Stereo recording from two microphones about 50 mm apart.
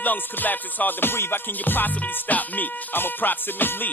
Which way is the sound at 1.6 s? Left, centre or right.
Left.